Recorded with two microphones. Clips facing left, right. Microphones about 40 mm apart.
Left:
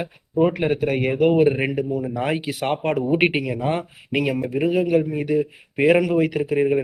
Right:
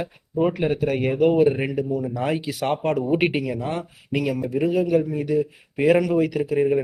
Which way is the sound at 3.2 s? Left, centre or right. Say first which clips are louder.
Left 2 dB; left.